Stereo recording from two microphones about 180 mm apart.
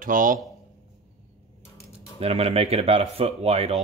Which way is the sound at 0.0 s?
50° right (ahead or behind).